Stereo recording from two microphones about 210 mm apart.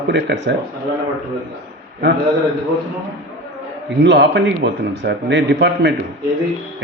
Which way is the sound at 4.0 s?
55° right (ahead or behind).